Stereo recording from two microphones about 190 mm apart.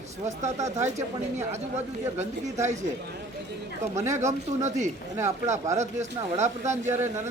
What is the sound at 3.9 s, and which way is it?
Speech, 15° right (ahead or behind).